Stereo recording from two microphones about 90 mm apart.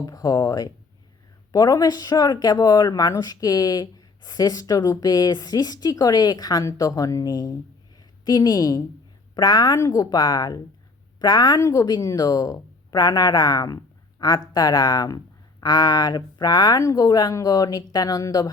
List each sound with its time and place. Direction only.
0.0 s a woman's voice: 40° left (ahead or behind)
11.6 s speech: 40° left (ahead or behind)